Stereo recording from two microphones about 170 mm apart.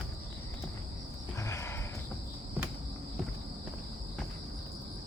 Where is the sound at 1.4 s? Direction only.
15° left (ahead or behind).